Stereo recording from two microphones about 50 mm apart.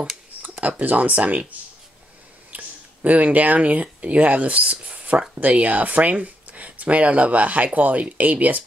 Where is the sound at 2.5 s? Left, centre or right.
Right.